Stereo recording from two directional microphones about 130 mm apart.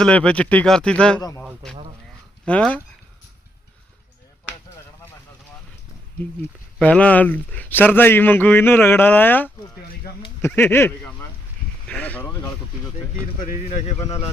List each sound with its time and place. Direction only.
0.0 s speech: 10° left (ahead or behind)
2.4 s speech: 10° left (ahead or behind)
6.1 s speech: 10° left (ahead or behind)
13.6 s speech: 55° left (ahead or behind)